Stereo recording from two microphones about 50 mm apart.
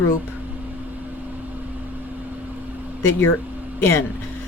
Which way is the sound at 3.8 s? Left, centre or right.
Left.